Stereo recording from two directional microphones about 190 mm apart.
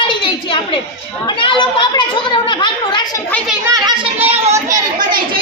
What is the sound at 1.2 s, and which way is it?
A woman's voice, 25° left (ahead or behind).